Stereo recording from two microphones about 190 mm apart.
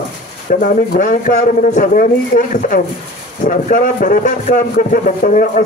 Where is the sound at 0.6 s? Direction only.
45° left (ahead or behind).